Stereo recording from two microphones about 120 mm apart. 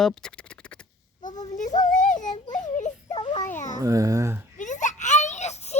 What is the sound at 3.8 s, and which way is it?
Speech, 30° right (ahead or behind).